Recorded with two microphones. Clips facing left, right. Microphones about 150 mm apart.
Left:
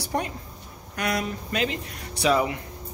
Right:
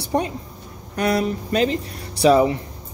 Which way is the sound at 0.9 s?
35° right (ahead or behind).